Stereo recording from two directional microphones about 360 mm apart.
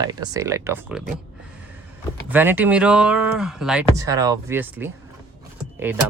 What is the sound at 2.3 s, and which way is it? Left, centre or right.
Speech, centre.